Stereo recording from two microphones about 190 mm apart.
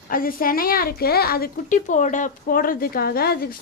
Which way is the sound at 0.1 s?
50° left (ahead or behind).